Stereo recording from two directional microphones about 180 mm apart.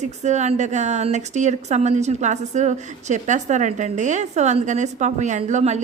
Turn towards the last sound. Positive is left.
turn(degrees=-40)  # may be behind; listen again after turning